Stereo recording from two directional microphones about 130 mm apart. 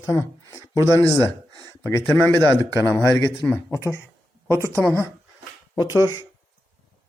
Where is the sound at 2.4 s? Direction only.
25° right (ahead or behind).